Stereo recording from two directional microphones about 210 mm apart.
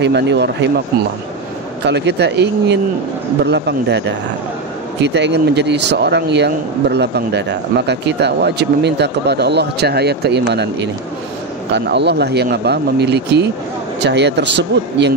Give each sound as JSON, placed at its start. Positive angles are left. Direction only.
{"t": 0.0, "sound": "speech", "side_deg": -55}
{"t": 1.9, "sound": "speech", "side_deg": -55}